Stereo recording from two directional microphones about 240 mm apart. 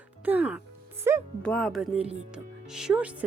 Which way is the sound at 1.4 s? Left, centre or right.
Centre.